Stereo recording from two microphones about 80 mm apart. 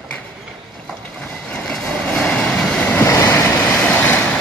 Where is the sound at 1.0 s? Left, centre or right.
Centre.